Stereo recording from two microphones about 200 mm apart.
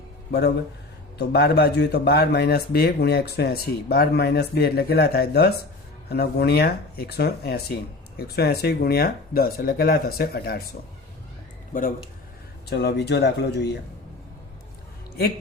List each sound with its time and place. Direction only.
0.3 s speech: 55° left (ahead or behind)
11.7 s speech: 45° left (ahead or behind)
12.6 s speech: 55° left (ahead or behind)